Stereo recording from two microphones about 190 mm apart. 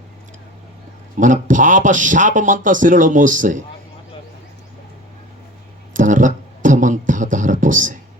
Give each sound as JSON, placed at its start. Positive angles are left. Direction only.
{"t": 1.1, "sound": "speech", "side_deg": -45}
{"t": 5.9, "sound": "beatboxing", "side_deg": -45}